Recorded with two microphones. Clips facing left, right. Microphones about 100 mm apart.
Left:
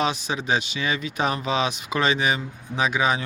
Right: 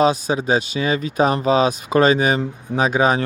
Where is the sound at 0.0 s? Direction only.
35° right (ahead or behind).